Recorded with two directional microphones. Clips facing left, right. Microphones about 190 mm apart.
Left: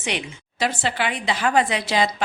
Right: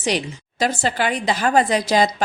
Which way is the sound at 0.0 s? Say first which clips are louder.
Right 6 dB; 40° right (ahead or behind).